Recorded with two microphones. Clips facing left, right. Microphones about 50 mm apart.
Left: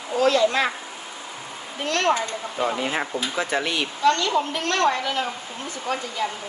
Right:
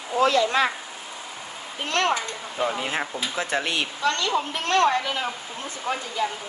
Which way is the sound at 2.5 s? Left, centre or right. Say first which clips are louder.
Left 1 dB; centre.